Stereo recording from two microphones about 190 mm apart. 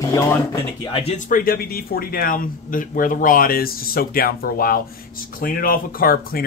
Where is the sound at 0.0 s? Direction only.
15° left (ahead or behind).